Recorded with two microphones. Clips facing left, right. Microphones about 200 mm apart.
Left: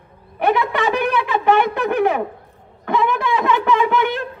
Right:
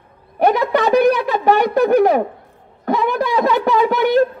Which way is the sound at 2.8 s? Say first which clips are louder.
Right 2 dB; 40° right (ahead or behind).